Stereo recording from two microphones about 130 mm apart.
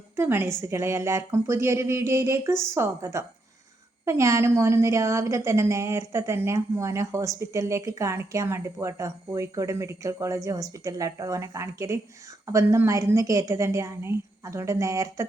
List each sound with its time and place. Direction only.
0.2 s a woman's voice: 15° right (ahead or behind)